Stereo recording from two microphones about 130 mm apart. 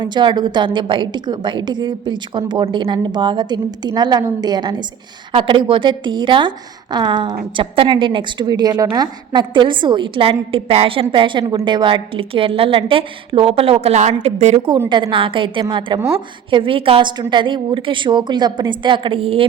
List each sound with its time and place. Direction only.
0.0 s a woman's voice: 35° right (ahead or behind); by 14.6 s 60° right (ahead or behind)
14.8 s a woman's voice: 35° right (ahead or behind)